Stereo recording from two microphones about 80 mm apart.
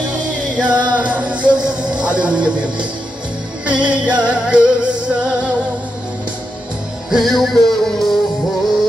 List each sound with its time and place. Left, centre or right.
0.6 s music: centre
7.1 s music: centre